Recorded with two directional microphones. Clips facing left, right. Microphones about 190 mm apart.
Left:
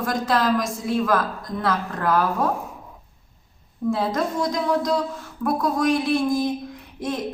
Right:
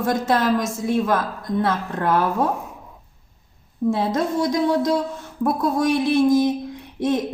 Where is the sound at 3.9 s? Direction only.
25° right (ahead or behind).